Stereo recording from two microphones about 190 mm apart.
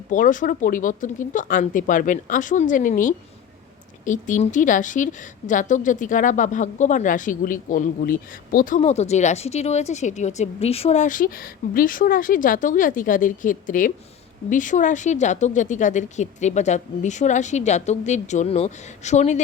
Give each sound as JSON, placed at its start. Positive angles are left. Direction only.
{"t": 0.1, "sound": "a woman's voice", "side_deg": 45}